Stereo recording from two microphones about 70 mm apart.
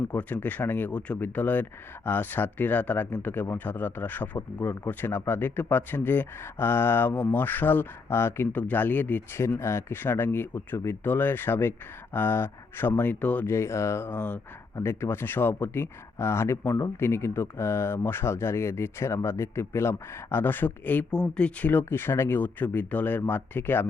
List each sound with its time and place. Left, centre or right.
0.1 s speech: left
7.1 s speech: centre
7.3 s speech: left
8.5 s speech: left
9.6 s speech: left
13.0 s speech: left
13.4 s speech: left
14.2 s speech: left
14.8 s speech: left
21.1 s speech: centre
21.7 s speech: left